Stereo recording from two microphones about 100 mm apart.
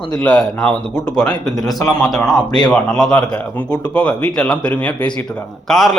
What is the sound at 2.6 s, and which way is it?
Speech, 5° left (ahead or behind).